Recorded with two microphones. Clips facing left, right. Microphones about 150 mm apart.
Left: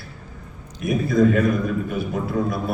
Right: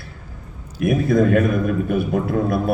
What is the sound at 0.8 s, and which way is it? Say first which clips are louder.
A man's voice: right 2 dB; 55° right (ahead or behind).